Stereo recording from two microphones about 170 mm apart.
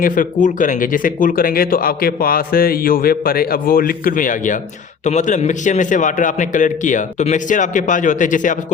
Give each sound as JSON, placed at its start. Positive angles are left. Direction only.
{"t": 0.0, "sound": "a man's voice", "side_deg": 50}